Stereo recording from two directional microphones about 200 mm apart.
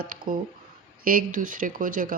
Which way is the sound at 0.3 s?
45° right (ahead or behind).